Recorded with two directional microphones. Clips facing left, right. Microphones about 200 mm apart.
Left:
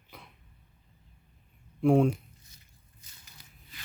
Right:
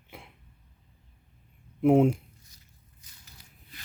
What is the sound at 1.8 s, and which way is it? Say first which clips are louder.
Speech: right 2 dB; 20° right (ahead or behind).